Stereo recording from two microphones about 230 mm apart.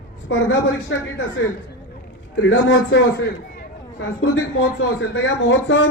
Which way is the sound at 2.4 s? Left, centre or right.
Left.